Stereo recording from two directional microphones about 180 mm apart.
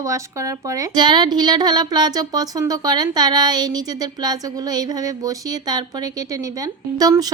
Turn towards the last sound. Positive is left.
turn(degrees=-20)  # may be behind; listen again after turning